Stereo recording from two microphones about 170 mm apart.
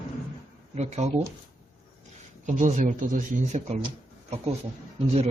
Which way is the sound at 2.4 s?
45° right (ahead or behind).